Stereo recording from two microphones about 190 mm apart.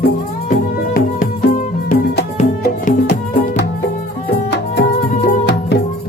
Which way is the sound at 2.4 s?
40° left (ahead or behind).